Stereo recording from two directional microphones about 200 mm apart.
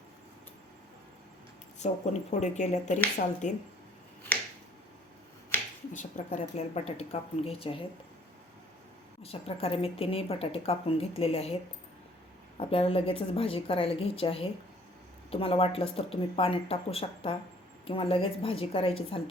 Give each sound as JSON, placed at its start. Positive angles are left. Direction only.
{"t": 1.8, "sound": "speech", "side_deg": 35}
{"t": 5.9, "sound": "speech", "side_deg": 40}
{"t": 9.2, "sound": "a woman's voice", "side_deg": 30}